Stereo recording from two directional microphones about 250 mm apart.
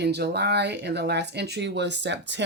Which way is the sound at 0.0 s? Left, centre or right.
Right.